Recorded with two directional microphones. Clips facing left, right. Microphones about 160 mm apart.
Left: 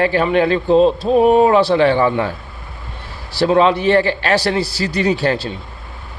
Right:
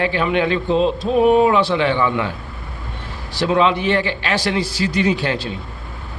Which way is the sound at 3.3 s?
35° left (ahead or behind).